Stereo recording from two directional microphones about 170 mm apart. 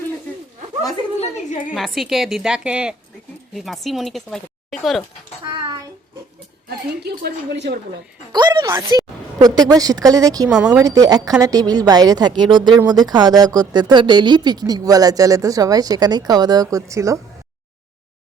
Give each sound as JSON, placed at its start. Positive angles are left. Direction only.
{"t": 1.7, "sound": "speech", "side_deg": 0}
{"t": 5.5, "sound": "a sound", "side_deg": -25}
{"t": 6.7, "sound": "a woman's voice", "side_deg": -70}
{"t": 8.3, "sound": "a woman's voice", "side_deg": -25}